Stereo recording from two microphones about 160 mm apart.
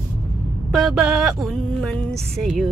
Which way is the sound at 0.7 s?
Centre (ahead or behind).